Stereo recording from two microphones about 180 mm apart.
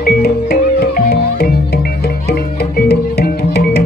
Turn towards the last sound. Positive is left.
turn(degrees=65)  # may be behind; listen again after turning